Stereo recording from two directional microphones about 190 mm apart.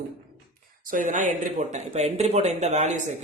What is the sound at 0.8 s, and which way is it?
Speech, 45° right (ahead or behind).